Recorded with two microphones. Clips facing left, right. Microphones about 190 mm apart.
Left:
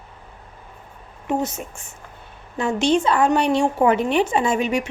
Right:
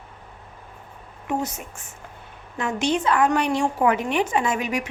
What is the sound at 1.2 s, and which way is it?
A woman's voice, 25° left (ahead or behind).